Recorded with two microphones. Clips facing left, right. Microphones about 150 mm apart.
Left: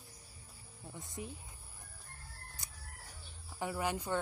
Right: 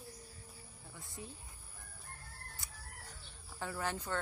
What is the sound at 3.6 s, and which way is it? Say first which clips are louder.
Speech: left 3 dB; 15° left (ahead or behind).